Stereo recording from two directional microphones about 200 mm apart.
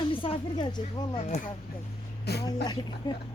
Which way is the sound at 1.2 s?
35° left (ahead or behind).